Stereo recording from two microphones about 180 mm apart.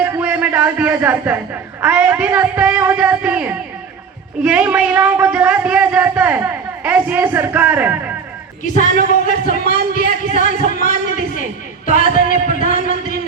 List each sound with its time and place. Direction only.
0.0 s music: 10° right (ahead or behind)
1.8 s speech: 10° right (ahead or behind)
8.6 s a man's voice: 45° left (ahead or behind)
11.9 s music: 50° left (ahead or behind)